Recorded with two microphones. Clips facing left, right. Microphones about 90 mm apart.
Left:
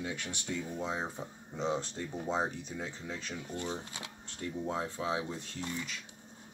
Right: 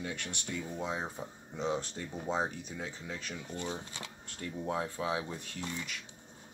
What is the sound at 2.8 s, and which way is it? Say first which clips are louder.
Speech: right 1 dB; 20° left (ahead or behind).